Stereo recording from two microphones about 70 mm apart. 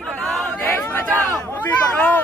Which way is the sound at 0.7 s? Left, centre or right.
Left.